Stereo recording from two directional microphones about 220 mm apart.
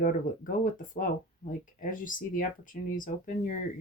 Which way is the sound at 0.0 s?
35° left (ahead or behind).